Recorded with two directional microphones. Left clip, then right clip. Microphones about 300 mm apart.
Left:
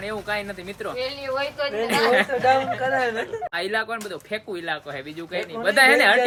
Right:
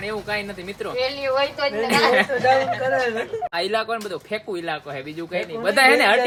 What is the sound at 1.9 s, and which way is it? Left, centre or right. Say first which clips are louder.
Speech: right 2 dB; centre.